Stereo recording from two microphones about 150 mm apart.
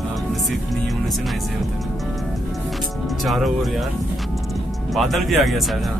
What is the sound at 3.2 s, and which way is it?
Speech, centre (ahead or behind).